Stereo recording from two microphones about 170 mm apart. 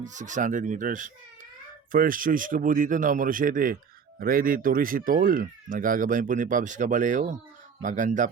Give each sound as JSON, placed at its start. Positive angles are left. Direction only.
{"t": 0.0, "sound": "speech", "side_deg": -45}